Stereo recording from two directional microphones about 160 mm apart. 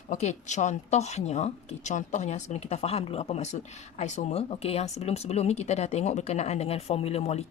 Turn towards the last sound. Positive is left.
turn(degrees=40)  # may be behind; listen again after turning